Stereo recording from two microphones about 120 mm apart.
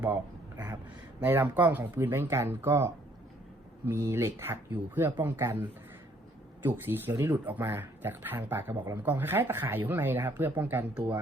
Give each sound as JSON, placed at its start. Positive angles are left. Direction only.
{"t": 1.2, "sound": "a man's voice", "side_deg": -15}
{"t": 7.4, "sound": "a man's voice", "side_deg": -15}